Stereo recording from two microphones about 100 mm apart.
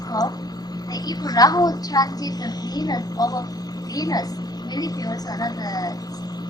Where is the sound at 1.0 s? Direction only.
40° left (ahead or behind).